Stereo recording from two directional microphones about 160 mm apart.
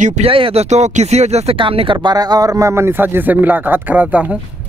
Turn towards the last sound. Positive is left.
turn(degrees=-10)  # may be behind; listen again after turning